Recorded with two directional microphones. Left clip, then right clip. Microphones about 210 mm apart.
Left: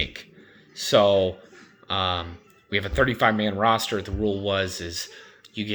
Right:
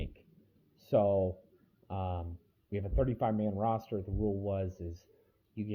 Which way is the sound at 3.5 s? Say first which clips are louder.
Left 12 dB; 55° left (ahead or behind).